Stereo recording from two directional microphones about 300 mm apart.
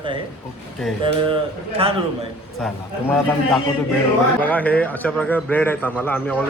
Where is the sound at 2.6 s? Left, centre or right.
Centre.